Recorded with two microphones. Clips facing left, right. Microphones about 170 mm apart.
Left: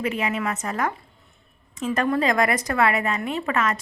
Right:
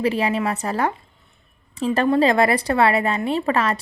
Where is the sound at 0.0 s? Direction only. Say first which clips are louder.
Right 5 dB; 35° right (ahead or behind).